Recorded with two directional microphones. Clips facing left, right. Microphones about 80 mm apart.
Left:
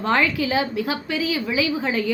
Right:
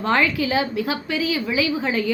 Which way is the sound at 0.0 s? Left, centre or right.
Centre.